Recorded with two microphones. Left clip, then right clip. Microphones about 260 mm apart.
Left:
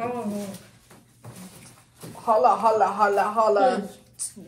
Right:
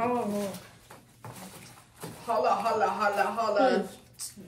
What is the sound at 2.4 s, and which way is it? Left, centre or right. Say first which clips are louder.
Speech: left 6 dB; centre.